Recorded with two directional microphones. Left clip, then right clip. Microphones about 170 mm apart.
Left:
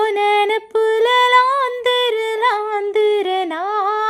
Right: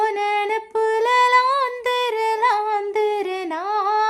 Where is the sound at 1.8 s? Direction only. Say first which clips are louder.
Left 3 dB; 25° left (ahead or behind).